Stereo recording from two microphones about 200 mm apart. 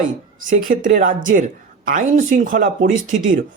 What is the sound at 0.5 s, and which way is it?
A woman's voice, 40° right (ahead or behind).